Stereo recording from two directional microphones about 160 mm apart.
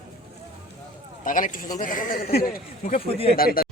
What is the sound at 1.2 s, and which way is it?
Speech, 55° left (ahead or behind).